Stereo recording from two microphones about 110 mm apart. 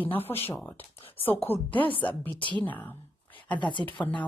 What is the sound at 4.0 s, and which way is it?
Speech, 10° left (ahead or behind).